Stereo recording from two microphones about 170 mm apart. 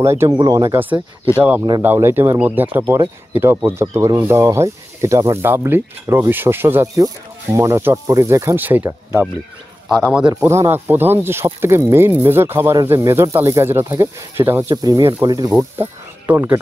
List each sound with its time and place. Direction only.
0.0 s a man's voice: 15° right (ahead or behind)
15.5 s speech: 10° right (ahead or behind)